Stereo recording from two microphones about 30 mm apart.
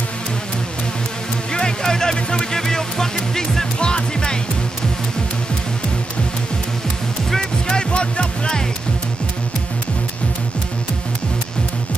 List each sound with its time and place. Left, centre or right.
1.5 s music: left
3.8 s music: left
7.3 s music: left